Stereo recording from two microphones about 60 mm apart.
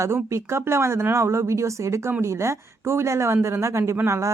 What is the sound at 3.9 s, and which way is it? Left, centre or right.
Speech, right.